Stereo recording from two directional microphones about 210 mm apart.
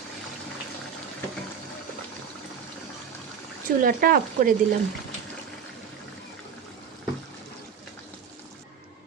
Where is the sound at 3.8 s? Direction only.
40° right (ahead or behind).